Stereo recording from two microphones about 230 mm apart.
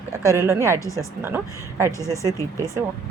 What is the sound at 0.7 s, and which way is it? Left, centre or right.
Speech, centre.